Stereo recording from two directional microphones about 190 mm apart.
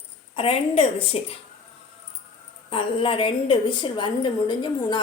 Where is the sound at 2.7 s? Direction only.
30° left (ahead or behind).